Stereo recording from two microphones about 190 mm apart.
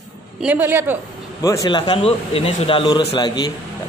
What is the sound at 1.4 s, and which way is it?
Speech, 15° left (ahead or behind).